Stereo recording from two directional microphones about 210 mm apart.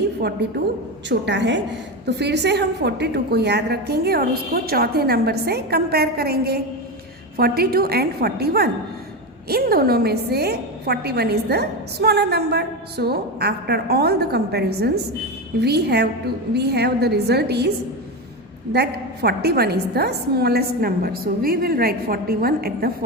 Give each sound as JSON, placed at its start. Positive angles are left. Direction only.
{"t": 0.2, "sound": "a woman's voice", "side_deg": -50}
{"t": 18.7, "sound": "a woman's voice", "side_deg": -50}